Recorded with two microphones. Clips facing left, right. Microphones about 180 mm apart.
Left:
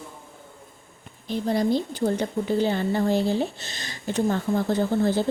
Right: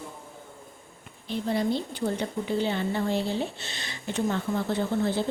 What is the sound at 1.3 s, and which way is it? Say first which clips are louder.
A woman's voice: left 4 dB; 40° left (ahead or behind).